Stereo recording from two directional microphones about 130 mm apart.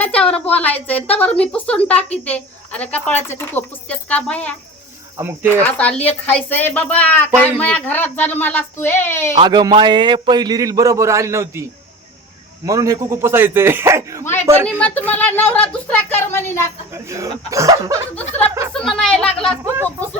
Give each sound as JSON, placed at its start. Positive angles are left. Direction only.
{"t": 0.0, "sound": "a woman's voice", "side_deg": 10}
{"t": 5.2, "sound": "speech", "side_deg": -15}
{"t": 5.6, "sound": "speech", "side_deg": 10}
{"t": 9.4, "sound": "a man's voice", "side_deg": -35}
{"t": 12.6, "sound": "speech", "side_deg": -25}
{"t": 14.8, "sound": "speech", "side_deg": 10}
{"t": 16.9, "sound": "speech", "side_deg": -25}
{"t": 18.1, "sound": "a woman's voice", "side_deg": 10}